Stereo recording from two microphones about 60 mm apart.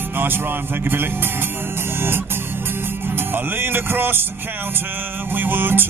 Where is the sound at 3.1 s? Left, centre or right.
Right.